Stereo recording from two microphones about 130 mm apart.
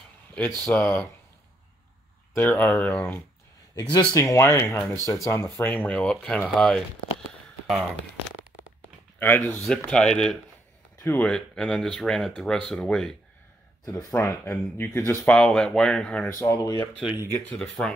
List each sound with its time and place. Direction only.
0.7 s speech: 15° left (ahead or behind)
2.3 s speech: 15° left (ahead or behind)
3.7 s speech: 30° left (ahead or behind); by 7.9 s centre (ahead or behind)
9.2 s speech: 15° left (ahead or behind)
13.8 s speech: 20° left (ahead or behind)
15.3 s speech: 5° left (ahead or behind)
16.3 s speech: 25° left (ahead or behind)
17.5 s speech: 5° left (ahead or behind)